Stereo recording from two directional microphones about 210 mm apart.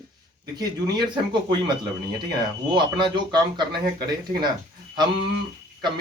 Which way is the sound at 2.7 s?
20° right (ahead or behind).